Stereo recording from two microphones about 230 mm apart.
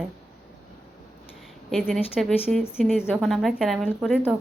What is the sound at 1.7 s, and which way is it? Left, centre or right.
A woman's voice, centre.